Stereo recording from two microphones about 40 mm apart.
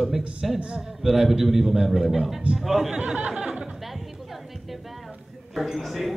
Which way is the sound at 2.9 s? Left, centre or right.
Right.